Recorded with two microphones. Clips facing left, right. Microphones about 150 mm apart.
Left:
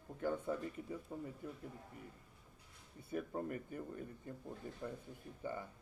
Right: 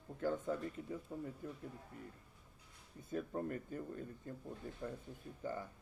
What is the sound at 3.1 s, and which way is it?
Speech, 15° left (ahead or behind).